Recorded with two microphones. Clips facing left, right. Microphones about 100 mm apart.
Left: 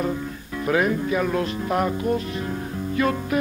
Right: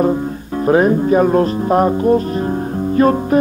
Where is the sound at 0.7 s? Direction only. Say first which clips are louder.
Right 9 dB; 35° right (ahead or behind).